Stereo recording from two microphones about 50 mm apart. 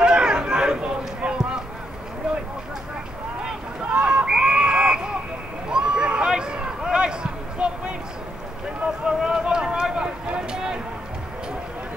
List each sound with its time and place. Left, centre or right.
0.0 s run: centre
3.4 s run: centre
5.7 s a sound: centre
8.8 s run: centre